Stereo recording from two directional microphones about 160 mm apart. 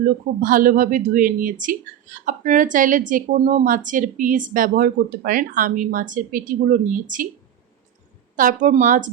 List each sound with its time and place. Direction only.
0.0 s a woman's voice: 60° right (ahead or behind)
8.4 s a woman's voice: 55° right (ahead or behind)